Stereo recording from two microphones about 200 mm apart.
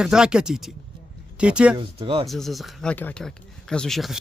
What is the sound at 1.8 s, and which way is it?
Speech, 25° right (ahead or behind).